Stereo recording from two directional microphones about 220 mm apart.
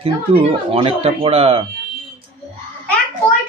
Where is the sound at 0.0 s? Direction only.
25° right (ahead or behind).